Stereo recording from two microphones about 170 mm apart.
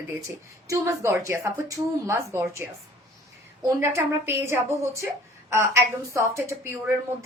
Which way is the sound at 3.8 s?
15° right (ahead or behind).